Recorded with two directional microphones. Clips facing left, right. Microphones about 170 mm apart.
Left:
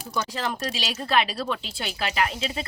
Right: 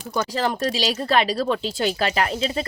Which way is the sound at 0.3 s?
40° right (ahead or behind).